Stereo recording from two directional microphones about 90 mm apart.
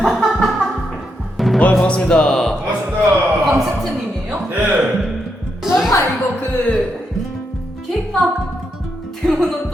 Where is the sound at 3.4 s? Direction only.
Centre (ahead or behind).